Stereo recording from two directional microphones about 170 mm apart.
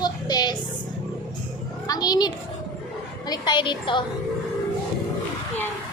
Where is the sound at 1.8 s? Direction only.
20° left (ahead or behind).